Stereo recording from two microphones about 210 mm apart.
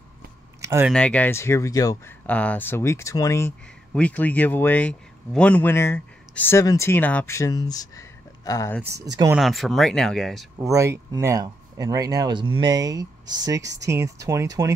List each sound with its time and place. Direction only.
0.6 s speech: 10° right (ahead or behind)
0.9 s speech: 5° left (ahead or behind)
8.9 s speech: 15° right (ahead or behind)
9.4 s speech: centre (ahead or behind)
10.6 s speech: 15° right (ahead or behind)